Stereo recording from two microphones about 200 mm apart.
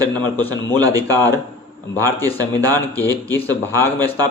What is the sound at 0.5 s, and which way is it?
Speech, 20° right (ahead or behind).